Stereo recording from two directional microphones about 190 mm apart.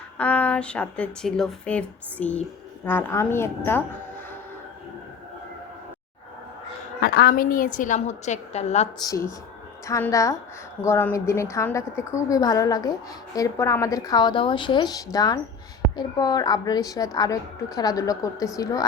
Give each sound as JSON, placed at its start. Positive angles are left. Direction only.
{"t": 0.2, "sound": "speech", "side_deg": 5}
{"t": 7.0, "sound": "a woman's voice", "side_deg": 55}
{"t": 9.0, "sound": "a woman's voice", "side_deg": 15}